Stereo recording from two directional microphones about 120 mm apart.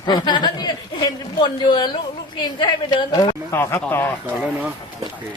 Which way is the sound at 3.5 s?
20° left (ahead or behind).